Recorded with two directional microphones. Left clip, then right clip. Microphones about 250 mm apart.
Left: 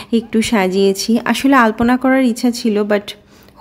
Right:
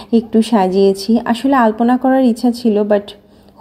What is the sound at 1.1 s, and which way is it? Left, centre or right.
Speech, left.